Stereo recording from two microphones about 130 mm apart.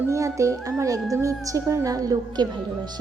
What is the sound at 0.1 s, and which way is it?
A woman's voice, 25° right (ahead or behind).